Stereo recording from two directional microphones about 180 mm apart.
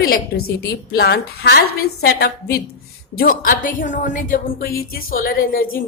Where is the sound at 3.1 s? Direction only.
50° left (ahead or behind).